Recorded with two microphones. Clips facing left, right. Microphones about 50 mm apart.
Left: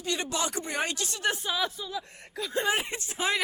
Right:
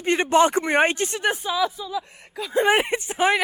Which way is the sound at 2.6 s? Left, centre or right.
Right.